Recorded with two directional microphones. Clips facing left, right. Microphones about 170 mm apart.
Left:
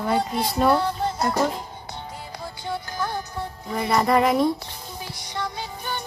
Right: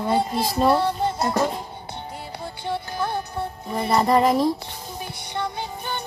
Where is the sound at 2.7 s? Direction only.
25° right (ahead or behind).